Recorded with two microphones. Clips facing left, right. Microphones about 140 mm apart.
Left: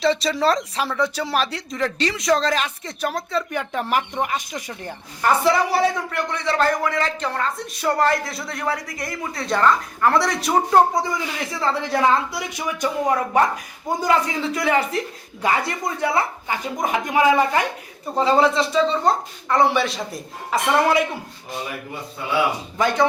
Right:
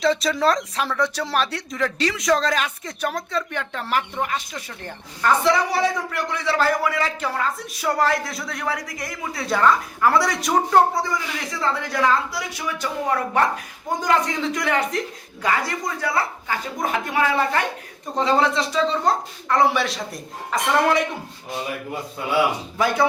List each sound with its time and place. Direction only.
0.0 s speech: centre (ahead or behind)
5.5 s speech: centre (ahead or behind)
11.7 s a woman's voice: 25° left (ahead or behind); by 15.0 s 5° left (ahead or behind)
15.4 s speech: 25° left (ahead or behind); by 21.0 s 5° left (ahead or behind)
22.8 s speech: 5° right (ahead or behind)